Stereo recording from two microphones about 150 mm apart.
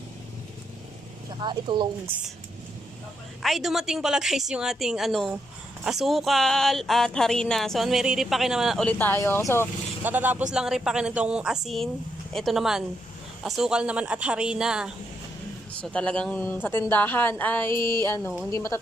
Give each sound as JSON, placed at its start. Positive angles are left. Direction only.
{"t": 1.3, "sound": "speech", "side_deg": -30}
{"t": 2.1, "sound": "speech", "side_deg": -10}
{"t": 3.4, "sound": "speech", "side_deg": 0}
{"t": 10.0, "sound": "speech", "side_deg": -10}
{"t": 15.8, "sound": "a woman's voice", "side_deg": 5}